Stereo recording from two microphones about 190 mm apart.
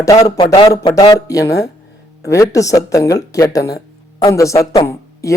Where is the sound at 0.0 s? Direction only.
20° left (ahead or behind).